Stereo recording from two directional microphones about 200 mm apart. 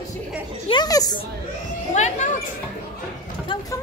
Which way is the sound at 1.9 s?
35° left (ahead or behind).